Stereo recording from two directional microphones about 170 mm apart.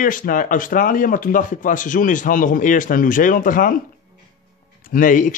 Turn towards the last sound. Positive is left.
turn(degrees=50)  # may be behind; listen again after turning